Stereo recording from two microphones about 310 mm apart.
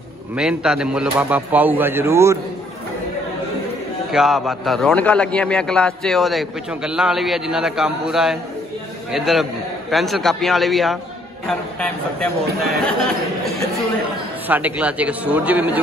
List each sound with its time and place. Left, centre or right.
0.4 s a man's voice: centre
4.1 s a man's voice: centre
14.5 s a man's voice: centre